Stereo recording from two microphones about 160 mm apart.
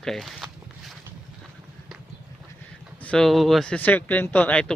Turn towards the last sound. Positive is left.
turn(degrees=10)  # may be behind; listen again after turning